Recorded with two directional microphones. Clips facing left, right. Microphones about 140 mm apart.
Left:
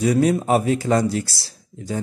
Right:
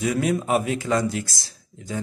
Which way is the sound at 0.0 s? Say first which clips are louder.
Left 5 dB; 35° left (ahead or behind).